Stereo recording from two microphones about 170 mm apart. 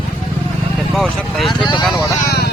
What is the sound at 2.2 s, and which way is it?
Vehicle, 65° left (ahead or behind).